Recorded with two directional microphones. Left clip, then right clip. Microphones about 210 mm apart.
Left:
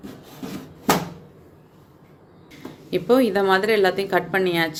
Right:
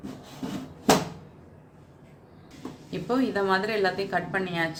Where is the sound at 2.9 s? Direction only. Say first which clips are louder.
Left 10 dB; 40° left (ahead or behind).